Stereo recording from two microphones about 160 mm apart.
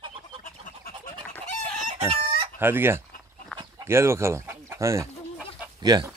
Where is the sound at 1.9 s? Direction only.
35° right (ahead or behind).